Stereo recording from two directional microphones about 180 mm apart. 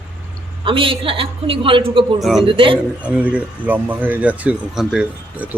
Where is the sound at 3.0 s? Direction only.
5° right (ahead or behind).